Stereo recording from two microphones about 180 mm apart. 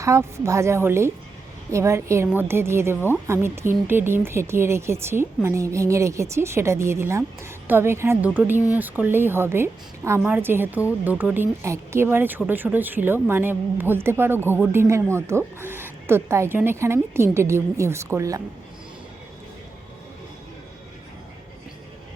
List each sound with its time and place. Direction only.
0.0 s a woman's voice: 15° right (ahead or behind)